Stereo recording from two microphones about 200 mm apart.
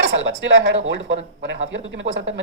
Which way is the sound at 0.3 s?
65° right (ahead or behind).